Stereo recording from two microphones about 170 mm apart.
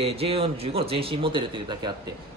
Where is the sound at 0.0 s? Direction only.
35° right (ahead or behind).